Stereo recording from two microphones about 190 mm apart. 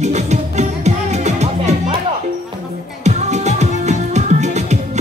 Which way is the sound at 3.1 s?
35° right (ahead or behind).